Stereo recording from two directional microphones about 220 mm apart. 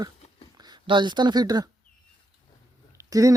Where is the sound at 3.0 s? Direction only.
15° right (ahead or behind).